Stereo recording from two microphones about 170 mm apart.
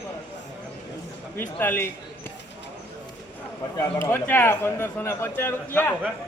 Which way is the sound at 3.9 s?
10° left (ahead or behind).